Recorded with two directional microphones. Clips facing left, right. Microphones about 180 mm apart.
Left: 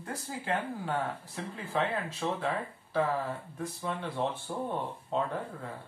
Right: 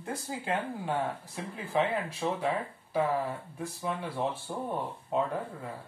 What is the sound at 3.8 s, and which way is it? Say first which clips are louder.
Mantra: right 1 dB; 10° right (ahead or behind).